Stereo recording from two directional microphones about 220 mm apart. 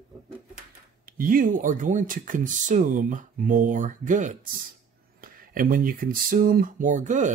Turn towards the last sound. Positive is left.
turn(degrees=-35)  # may be behind; listen again after turning